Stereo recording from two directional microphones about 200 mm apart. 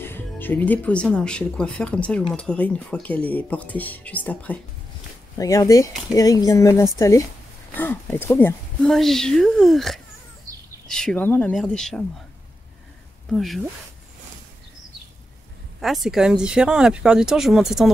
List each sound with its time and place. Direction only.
0.0 s speech: 10° left (ahead or behind)
13.3 s speech: centre (ahead or behind)
15.8 s speech: centre (ahead or behind)